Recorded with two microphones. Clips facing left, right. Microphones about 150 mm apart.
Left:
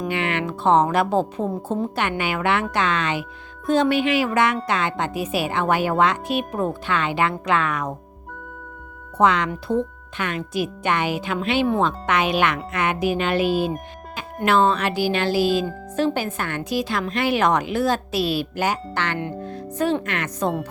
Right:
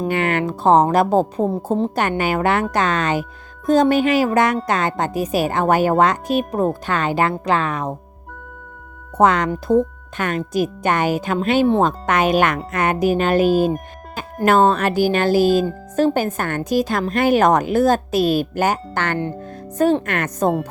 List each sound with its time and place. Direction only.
0.1 s a woman's voice: 45° right (ahead or behind)
9.1 s a woman's voice: 45° right (ahead or behind)